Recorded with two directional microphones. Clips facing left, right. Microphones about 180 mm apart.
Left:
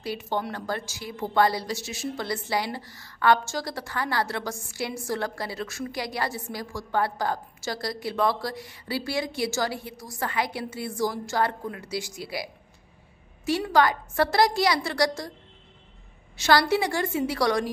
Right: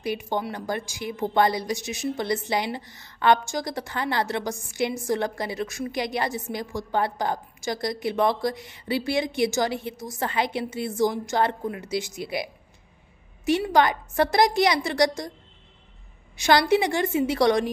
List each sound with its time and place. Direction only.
0.0 s a woman's voice: 15° right (ahead or behind)
13.5 s a woman's voice: 20° right (ahead or behind)
16.3 s a woman's voice: 15° right (ahead or behind)